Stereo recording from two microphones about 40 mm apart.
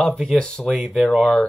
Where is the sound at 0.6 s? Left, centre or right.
Centre.